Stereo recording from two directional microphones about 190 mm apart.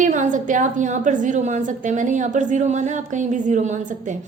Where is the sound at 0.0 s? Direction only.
40° right (ahead or behind).